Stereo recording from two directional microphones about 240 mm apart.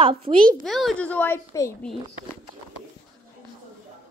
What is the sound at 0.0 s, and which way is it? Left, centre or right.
Speech, right.